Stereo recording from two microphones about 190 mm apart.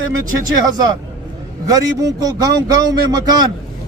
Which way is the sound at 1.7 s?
20° right (ahead or behind).